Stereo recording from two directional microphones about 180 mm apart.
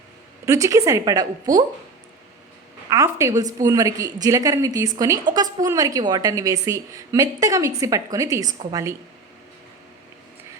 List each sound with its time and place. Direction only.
0.4 s a woman's voice: 15° right (ahead or behind)
2.9 s a woman's voice: 15° right (ahead or behind)